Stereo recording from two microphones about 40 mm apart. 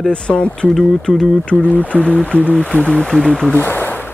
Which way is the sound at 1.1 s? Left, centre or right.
Left.